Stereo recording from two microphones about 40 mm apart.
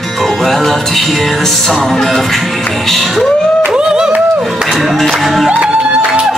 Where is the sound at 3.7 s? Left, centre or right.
Centre.